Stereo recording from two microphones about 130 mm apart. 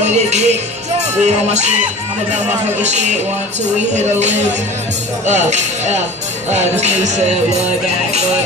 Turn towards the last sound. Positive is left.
turn(degrees=-60)  # may be behind; listen again after turning